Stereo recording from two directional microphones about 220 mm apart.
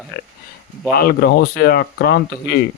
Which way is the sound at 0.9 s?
45° left (ahead or behind).